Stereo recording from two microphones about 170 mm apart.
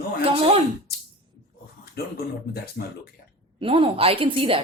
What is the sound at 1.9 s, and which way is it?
Speech, 65° left (ahead or behind).